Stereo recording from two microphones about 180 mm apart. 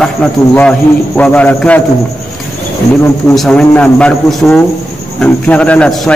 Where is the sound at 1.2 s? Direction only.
10° left (ahead or behind).